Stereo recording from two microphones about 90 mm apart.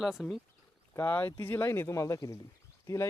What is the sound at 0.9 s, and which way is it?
Speech, 25° left (ahead or behind).